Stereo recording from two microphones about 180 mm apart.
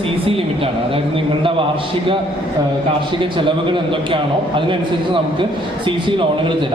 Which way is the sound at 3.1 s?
25° right (ahead or behind).